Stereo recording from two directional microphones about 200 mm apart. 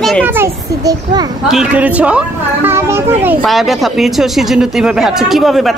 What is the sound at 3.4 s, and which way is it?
Speech, centre (ahead or behind).